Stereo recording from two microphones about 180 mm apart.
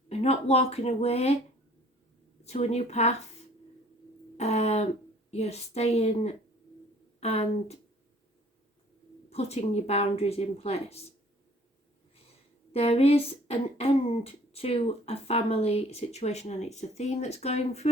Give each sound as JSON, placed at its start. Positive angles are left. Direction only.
{"t": 0.1, "sound": "speech", "side_deg": 35}
{"t": 2.4, "sound": "speech", "side_deg": 35}
{"t": 4.4, "sound": "a sound", "side_deg": 35}
{"t": 5.3, "sound": "speech", "side_deg": 35}
{"t": 9.3, "sound": "speech", "side_deg": 35}
{"t": 12.7, "sound": "speech", "side_deg": 35}